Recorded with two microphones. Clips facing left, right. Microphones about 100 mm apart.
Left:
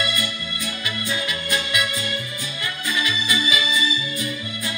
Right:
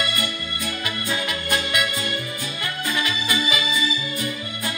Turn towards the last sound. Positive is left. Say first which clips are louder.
# even
turn(degrees=-50)  # may be behind; listen again after turning